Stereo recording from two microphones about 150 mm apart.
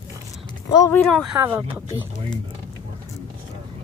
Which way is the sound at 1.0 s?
Centre (ahead or behind).